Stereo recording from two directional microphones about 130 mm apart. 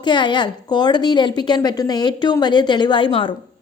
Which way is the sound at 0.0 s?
35° left (ahead or behind).